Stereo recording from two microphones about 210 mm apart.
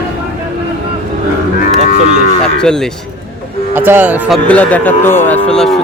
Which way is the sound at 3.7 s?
10° right (ahead or behind).